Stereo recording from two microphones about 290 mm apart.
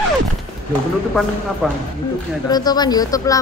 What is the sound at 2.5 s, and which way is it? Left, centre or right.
Speech, centre.